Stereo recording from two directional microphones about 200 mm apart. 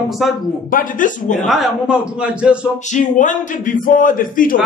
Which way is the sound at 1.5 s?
5° right (ahead or behind).